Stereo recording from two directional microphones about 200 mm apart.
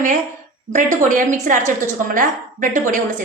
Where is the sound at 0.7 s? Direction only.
40° right (ahead or behind).